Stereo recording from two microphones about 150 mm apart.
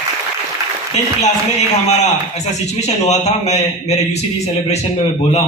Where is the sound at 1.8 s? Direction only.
50° left (ahead or behind).